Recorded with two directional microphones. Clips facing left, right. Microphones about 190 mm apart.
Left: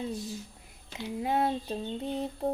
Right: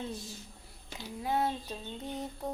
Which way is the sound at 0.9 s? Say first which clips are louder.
Left 3 dB; 20° left (ahead or behind).